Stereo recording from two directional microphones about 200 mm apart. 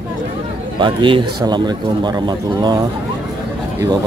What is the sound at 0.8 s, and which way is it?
Speech, 25° right (ahead or behind).